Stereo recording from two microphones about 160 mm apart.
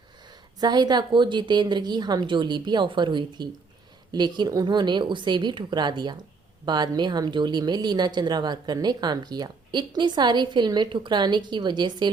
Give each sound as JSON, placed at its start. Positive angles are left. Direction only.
{"t": 0.6, "sound": "a woman's voice", "side_deg": -25}